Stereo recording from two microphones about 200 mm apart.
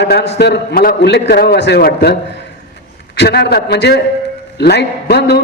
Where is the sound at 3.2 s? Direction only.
55° left (ahead or behind).